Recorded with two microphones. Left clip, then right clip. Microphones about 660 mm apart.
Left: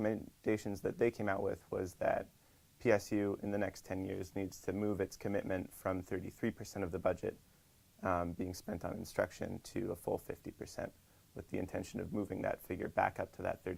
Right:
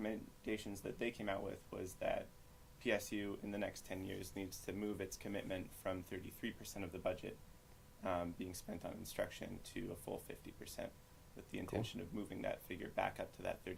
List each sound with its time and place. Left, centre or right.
0.0 s speech: left